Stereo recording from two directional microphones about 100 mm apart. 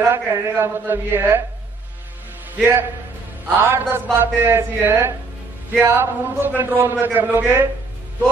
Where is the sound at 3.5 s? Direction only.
20° right (ahead or behind).